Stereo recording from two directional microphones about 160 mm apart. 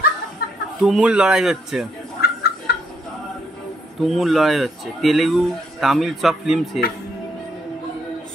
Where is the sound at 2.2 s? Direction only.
80° left.